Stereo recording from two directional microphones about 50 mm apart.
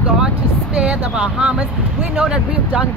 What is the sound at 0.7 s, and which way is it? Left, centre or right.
Speech, right.